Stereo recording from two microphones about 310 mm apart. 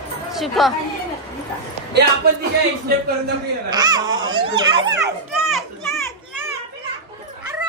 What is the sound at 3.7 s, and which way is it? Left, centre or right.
Speech, centre.